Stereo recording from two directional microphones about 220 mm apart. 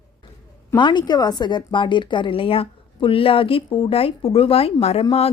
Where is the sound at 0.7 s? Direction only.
20° left (ahead or behind).